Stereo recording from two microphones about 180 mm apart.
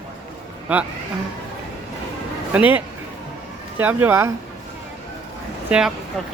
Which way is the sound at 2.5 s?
10° right (ahead or behind).